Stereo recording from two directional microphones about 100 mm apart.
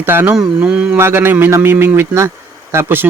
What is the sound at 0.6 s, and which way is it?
Speech, 10° right (ahead or behind).